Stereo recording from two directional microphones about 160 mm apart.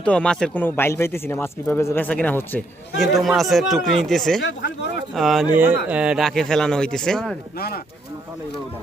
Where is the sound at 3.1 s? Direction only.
Centre (ahead or behind).